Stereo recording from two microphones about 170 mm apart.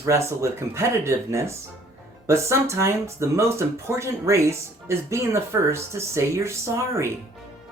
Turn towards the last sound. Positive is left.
turn(degrees=-15)  # may be behind; listen again after turning